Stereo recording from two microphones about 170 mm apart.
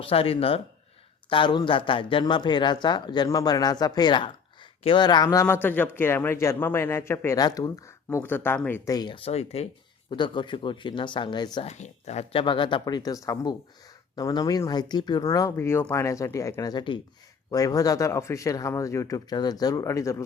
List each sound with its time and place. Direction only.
0.0 s speech: 35° left (ahead or behind)
11.7 s speech: 40° left (ahead or behind); by 20.2 s 20° left (ahead or behind)